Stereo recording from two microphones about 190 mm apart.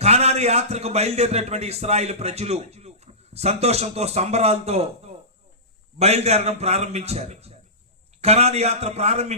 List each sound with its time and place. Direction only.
0.0 s a man's voice: 35° right (ahead or behind)